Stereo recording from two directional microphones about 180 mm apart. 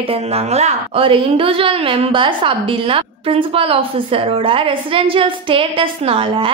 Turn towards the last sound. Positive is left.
turn(degrees=-30)  # may be behind; listen again after turning